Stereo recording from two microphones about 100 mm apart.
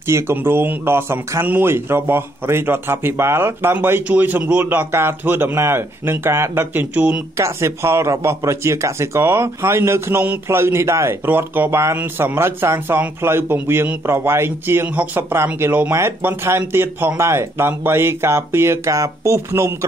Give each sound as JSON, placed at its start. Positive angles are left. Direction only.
{"t": 0.0, "sound": "a man's voice", "side_deg": -25}
{"t": 7.3, "sound": "a man's voice", "side_deg": -30}